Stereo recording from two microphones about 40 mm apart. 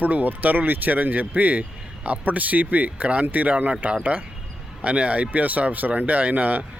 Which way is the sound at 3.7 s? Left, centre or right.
Right.